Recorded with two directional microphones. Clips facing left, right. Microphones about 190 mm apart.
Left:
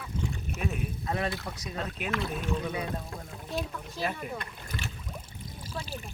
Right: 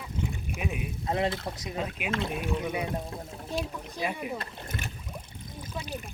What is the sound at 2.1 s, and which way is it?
Speech, 25° right (ahead or behind).